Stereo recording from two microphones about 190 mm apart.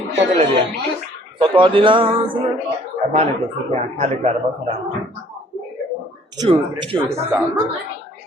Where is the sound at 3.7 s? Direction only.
35° right (ahead or behind).